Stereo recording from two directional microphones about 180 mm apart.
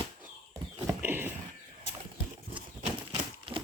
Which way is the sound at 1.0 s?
10° right (ahead or behind).